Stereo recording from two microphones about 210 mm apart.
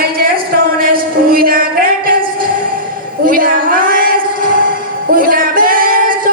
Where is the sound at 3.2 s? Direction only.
45° right (ahead or behind).